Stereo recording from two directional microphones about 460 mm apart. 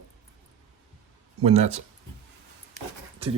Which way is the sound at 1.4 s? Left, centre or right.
Centre.